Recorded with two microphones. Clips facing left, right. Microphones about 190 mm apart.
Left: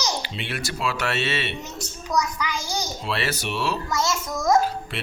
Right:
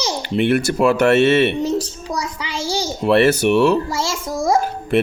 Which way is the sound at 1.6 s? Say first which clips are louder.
Right 15 dB; 30° right (ahead or behind).